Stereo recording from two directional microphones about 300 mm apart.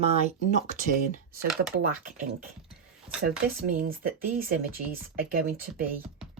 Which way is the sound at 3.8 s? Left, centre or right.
Right.